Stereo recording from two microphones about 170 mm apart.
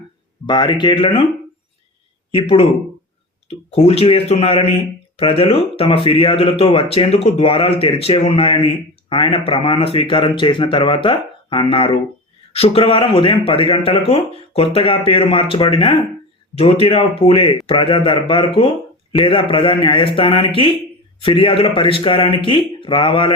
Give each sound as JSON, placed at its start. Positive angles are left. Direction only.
{"t": 0.4, "sound": "speech", "side_deg": 25}
{"t": 2.3, "sound": "speech", "side_deg": 35}